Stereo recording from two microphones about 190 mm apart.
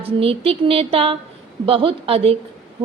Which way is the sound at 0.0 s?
30° right (ahead or behind).